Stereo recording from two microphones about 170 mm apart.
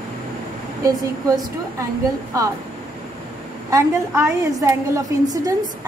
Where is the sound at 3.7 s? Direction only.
15° right (ahead or behind).